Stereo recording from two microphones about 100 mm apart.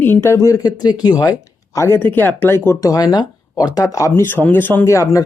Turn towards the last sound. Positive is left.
turn(degrees=30)  # may be behind; listen again after turning